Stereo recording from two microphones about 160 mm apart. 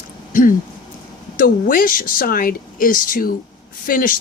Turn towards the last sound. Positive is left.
turn(degrees=60)  # may be behind; listen again after turning